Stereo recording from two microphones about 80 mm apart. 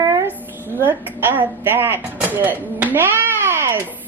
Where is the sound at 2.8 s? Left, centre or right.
Right.